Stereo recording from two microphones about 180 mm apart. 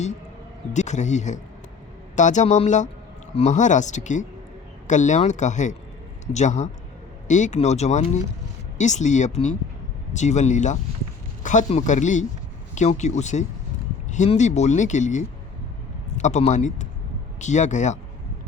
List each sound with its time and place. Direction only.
0.7 s speech: 40° left (ahead or behind)